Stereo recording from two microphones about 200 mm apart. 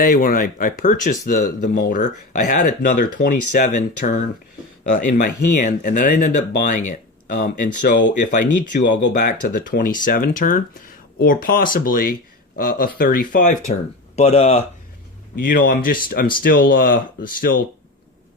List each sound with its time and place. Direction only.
0.0 s speech: 40° left (ahead or behind)
8.8 s speech: 60° left (ahead or behind)
9.2 s speech: 45° left (ahead or behind)
15.4 s speech: 45° left (ahead or behind)